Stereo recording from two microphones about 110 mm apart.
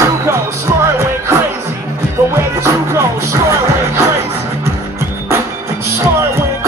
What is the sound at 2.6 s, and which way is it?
Music, 25° right (ahead or behind).